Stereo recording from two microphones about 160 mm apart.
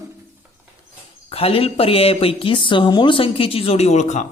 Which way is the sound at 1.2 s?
40° left (ahead or behind).